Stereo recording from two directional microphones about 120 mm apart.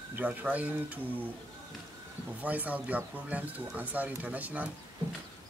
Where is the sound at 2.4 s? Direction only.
15° right (ahead or behind).